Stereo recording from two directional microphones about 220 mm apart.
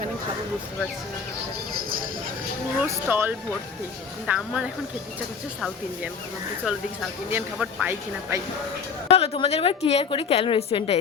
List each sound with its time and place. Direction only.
2.8 s speech: 10° right (ahead or behind)
7.3 s speech: 5° right (ahead or behind)
9.0 s a woman's voice: 25° left (ahead or behind)